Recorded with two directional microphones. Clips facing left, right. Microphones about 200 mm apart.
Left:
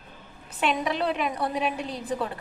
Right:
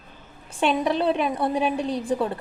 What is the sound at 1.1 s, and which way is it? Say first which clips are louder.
Speech: right 4 dB; 30° right (ahead or behind).